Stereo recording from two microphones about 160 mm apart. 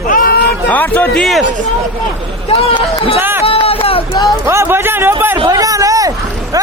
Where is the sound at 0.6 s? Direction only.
10° left (ahead or behind).